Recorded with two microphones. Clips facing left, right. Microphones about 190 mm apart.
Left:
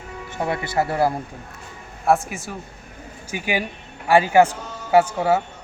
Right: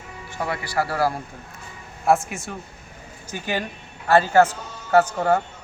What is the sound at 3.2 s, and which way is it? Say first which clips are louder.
A man's voice: left 2 dB; 10° left (ahead or behind).